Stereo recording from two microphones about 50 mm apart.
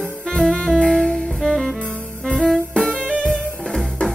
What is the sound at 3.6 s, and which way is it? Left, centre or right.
Music, centre.